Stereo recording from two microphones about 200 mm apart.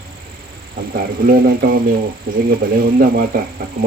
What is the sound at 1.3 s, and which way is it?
Speech, 45° right (ahead or behind).